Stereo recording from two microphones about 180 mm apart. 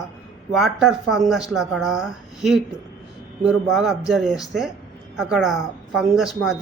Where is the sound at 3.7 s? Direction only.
Centre (ahead or behind).